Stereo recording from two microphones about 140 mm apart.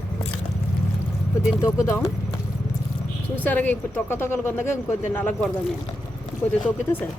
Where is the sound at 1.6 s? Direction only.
20° left (ahead or behind).